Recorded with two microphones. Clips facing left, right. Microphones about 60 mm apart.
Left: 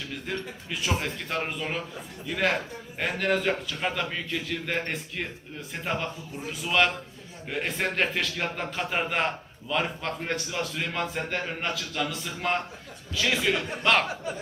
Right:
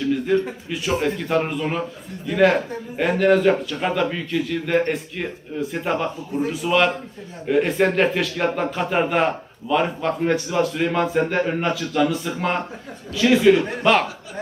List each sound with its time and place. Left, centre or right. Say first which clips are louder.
0.7 s a man's voice: right 6 dB; centre
10.8 s a man's voice: right 10 dB; right; by 14.1 s centre